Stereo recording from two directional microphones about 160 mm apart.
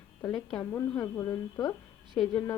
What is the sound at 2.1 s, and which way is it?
Speech, 5° left (ahead or behind).